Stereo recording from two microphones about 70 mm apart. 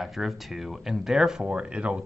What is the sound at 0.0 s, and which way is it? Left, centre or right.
Speech, centre.